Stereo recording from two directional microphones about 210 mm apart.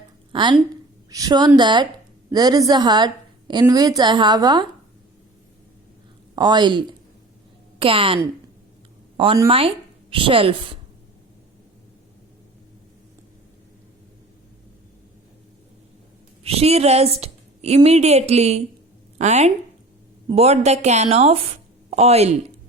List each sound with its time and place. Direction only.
0.3 s a woman's voice: 20° right (ahead or behind)
6.3 s a woman's voice: 20° right (ahead or behind)
16.4 s a woman's voice: 30° right (ahead or behind)